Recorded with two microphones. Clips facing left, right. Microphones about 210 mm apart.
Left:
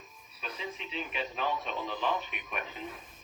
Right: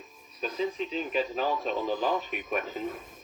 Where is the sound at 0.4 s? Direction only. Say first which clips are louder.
Right 10 dB; 35° right (ahead or behind).